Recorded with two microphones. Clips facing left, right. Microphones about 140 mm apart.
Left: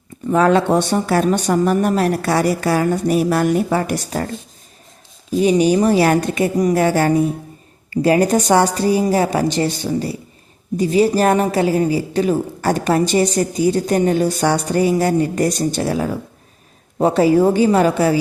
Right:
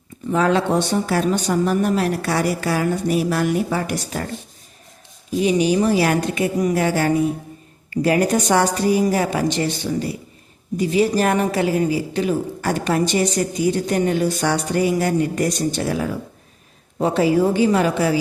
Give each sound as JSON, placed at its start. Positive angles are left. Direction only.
{"t": 0.3, "sound": "speech", "side_deg": 50}
{"t": 5.4, "sound": "speech", "side_deg": 40}
{"t": 7.9, "sound": "a woman's voice", "side_deg": 30}